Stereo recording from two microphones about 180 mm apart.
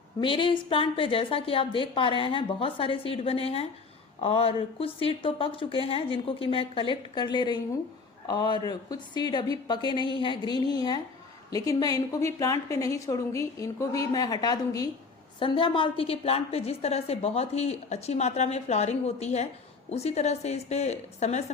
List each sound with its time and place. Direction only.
0.2 s a woman's voice: 25° left (ahead or behind)